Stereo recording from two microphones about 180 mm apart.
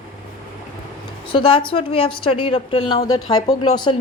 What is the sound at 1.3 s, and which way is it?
A woman's voice, 30° left (ahead or behind).